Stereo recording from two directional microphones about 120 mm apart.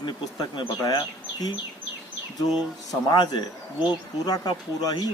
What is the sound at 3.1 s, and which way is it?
Speech, 35° left (ahead or behind).